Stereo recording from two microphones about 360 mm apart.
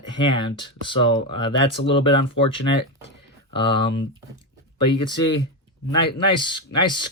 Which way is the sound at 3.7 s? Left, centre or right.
Left.